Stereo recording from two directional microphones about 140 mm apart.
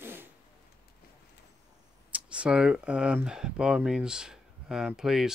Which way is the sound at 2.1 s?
10° right (ahead or behind).